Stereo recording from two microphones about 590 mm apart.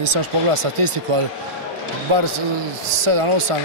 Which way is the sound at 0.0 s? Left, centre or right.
Right.